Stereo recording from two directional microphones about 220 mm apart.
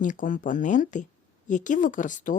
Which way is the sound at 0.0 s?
35° left (ahead or behind).